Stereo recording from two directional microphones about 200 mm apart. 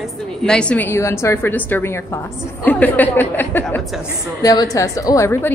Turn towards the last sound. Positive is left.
turn(degrees=10)  # may be behind; listen again after turning